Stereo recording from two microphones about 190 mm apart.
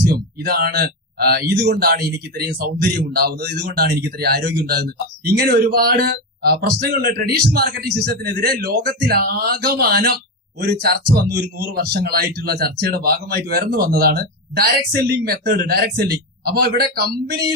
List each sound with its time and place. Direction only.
0.0 s a man's voice: 50° right (ahead or behind)